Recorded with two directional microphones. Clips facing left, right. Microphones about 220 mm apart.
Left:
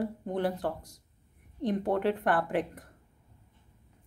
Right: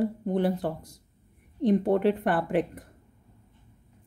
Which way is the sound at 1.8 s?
25° right (ahead or behind).